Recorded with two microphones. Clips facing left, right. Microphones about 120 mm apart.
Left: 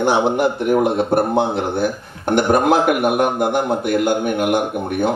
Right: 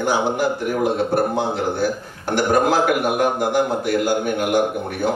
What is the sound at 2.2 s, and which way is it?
A man's voice, 25° left (ahead or behind).